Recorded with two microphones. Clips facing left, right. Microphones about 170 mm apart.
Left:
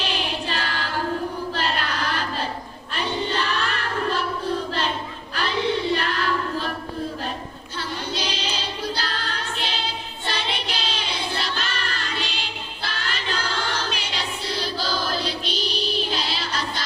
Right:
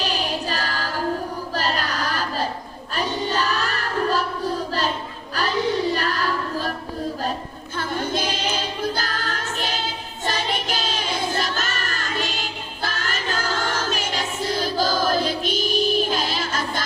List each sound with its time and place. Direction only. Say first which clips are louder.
0.0 s choir: right 2 dB; 40° right (ahead or behind)
1.5 s child singing: right 5 dB; 40° right (ahead or behind)
2.9 s choir: right 1 dB; 40° right (ahead or behind)
5.3 s a sound: right 1 dB; 40° right (ahead or behind)
7.8 s music: right 5 dB; 50° right (ahead or behind)
10.2 s child singing: right 4 dB; 45° right (ahead or behind)